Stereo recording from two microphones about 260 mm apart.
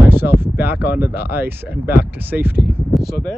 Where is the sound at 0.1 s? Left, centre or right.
Centre.